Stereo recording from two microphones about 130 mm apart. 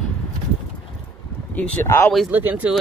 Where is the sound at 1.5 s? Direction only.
10° left (ahead or behind).